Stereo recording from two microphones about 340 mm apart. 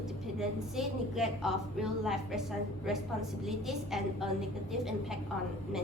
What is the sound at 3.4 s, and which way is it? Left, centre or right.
A woman's voice, centre.